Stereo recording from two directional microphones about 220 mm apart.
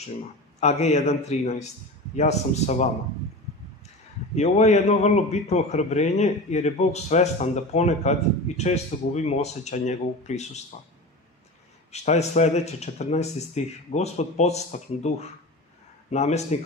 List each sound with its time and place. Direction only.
0.6 s a man's voice: 30° left (ahead or behind)
4.4 s a man's voice: 30° left (ahead or behind)
11.9 s a man's voice: 30° left (ahead or behind)